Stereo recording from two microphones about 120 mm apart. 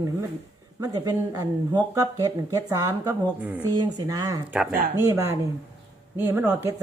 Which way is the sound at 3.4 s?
15° right (ahead or behind).